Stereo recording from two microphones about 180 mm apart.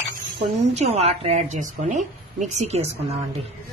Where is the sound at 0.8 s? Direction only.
35° right (ahead or behind).